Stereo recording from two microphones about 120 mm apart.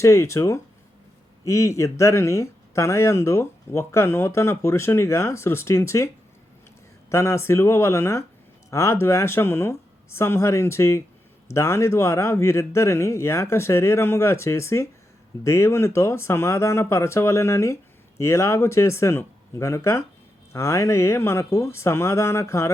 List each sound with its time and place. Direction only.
0.0 s speech: 25° left (ahead or behind)
7.1 s speech: 20° left (ahead or behind)